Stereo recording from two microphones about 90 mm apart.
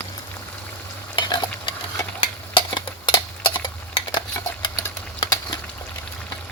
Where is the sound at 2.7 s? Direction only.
60° left (ahead or behind).